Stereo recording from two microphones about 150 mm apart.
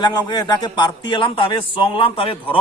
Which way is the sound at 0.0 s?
30° left (ahead or behind).